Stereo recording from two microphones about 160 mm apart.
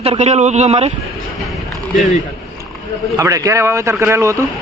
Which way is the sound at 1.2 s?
Centre (ahead or behind).